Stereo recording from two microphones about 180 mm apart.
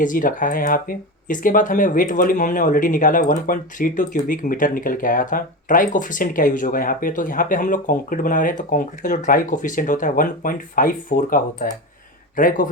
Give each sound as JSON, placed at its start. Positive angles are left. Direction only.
{"t": 0.0, "sound": "speech", "side_deg": 50}